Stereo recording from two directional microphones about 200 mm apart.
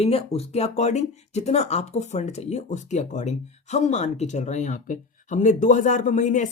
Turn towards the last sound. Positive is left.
turn(degrees=40)  # may be behind; listen again after turning